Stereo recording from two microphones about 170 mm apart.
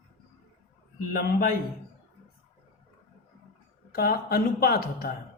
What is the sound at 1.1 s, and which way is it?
Speech, 60° left (ahead or behind).